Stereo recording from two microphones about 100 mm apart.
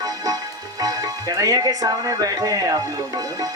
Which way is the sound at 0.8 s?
40° right (ahead or behind).